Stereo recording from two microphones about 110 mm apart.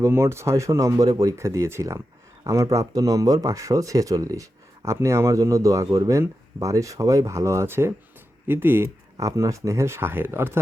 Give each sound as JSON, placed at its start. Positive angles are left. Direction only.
{"t": 0.0, "sound": "speech", "side_deg": -25}